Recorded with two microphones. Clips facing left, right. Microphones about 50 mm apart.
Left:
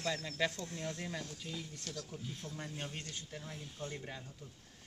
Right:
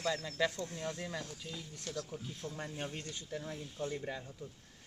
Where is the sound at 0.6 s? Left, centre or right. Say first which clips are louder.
Right 2 dB; centre.